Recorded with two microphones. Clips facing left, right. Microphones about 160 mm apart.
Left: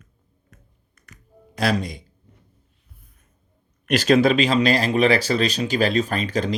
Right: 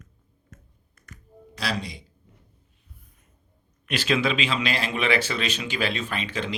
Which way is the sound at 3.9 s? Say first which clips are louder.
Left 8 dB; 40° left (ahead or behind).